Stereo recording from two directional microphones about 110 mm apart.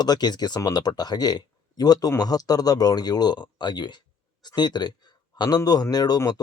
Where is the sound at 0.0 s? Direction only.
40° left (ahead or behind).